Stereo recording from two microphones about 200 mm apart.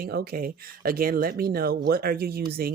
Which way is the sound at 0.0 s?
50° right (ahead or behind).